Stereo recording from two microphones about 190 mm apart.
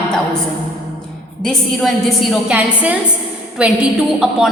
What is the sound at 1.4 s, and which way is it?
A woman's voice, centre (ahead or behind).